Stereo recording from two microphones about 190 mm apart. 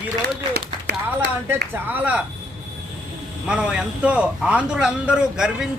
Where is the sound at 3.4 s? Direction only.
5° right (ahead or behind).